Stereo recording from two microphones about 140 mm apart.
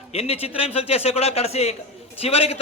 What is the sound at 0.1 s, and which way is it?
A man's voice, 45° left (ahead or behind).